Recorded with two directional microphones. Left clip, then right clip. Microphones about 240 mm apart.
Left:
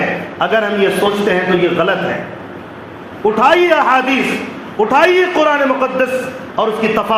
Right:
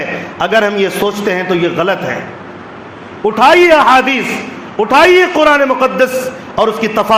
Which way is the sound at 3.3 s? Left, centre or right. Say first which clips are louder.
Right 5 dB; right.